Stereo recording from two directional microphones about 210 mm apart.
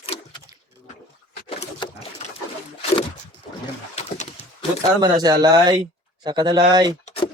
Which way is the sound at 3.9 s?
30° left (ahead or behind).